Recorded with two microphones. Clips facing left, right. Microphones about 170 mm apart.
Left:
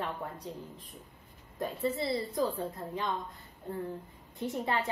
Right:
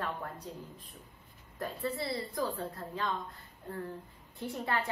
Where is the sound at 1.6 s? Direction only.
20° left (ahead or behind).